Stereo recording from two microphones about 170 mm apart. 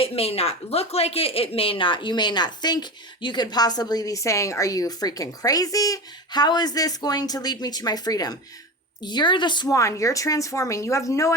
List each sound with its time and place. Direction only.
0.0 s speech: 35° left (ahead or behind); by 11.3 s 20° left (ahead or behind)